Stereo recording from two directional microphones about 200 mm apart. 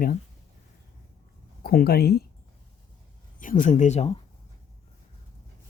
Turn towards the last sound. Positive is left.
turn(degrees=30)  # may be behind; listen again after turning